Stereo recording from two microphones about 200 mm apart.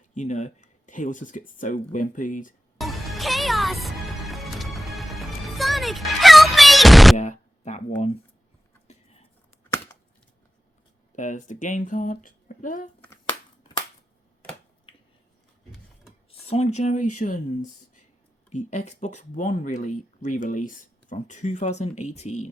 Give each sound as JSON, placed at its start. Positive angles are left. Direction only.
{"t": 0.1, "sound": "speech", "side_deg": 35}
{"t": 2.7, "sound": "music", "side_deg": 0}
{"t": 7.2, "sound": "speech", "side_deg": 35}
{"t": 11.1, "sound": "speech", "side_deg": 40}
{"t": 16.5, "sound": "speech", "side_deg": 35}